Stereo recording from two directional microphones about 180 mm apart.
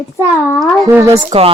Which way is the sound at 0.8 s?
15° right (ahead or behind).